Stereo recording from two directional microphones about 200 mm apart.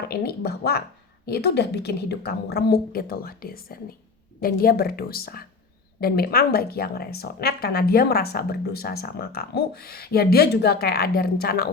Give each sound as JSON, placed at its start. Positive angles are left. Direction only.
{"t": 0.1, "sound": "a woman's voice", "side_deg": 50}